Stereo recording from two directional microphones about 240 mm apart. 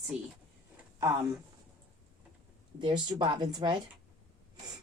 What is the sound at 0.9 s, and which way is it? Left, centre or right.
Speech, centre.